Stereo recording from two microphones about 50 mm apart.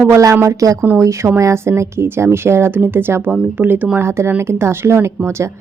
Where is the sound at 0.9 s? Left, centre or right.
Right.